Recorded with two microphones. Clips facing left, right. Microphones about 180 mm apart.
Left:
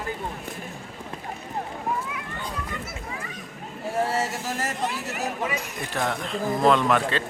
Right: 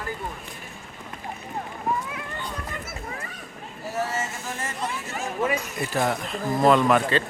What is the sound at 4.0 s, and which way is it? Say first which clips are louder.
Speech: left 3 dB; 65° left (ahead or behind).